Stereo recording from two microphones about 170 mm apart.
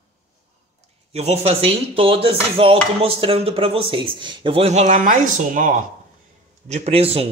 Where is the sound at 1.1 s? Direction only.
40° right (ahead or behind).